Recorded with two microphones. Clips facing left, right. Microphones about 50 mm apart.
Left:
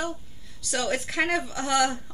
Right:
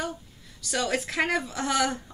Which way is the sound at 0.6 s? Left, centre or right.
Centre.